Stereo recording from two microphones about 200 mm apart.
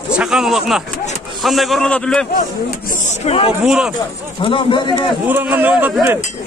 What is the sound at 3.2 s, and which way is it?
Speech, 30° left (ahead or behind).